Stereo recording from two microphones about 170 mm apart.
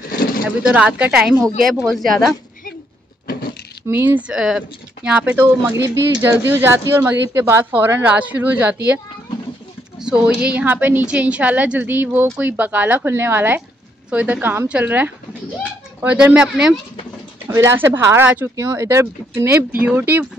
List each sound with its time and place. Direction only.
0.7 s speech: 5° right (ahead or behind)
3.8 s speech: 10° right (ahead or behind)
9.9 s speech: 5° right (ahead or behind)